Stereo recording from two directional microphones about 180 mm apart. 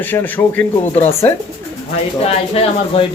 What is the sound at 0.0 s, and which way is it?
A man's voice, 10° left (ahead or behind).